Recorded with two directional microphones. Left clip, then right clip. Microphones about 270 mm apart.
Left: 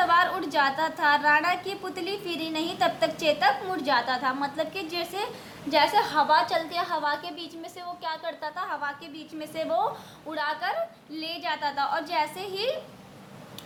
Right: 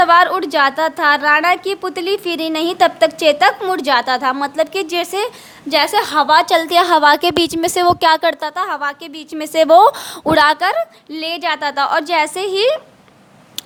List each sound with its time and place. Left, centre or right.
0.0 s a woman's voice: right